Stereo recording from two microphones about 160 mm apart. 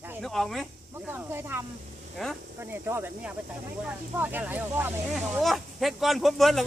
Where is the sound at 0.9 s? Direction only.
15° right (ahead or behind).